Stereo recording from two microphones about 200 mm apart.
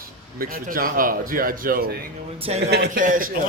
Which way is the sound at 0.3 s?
45° right (ahead or behind).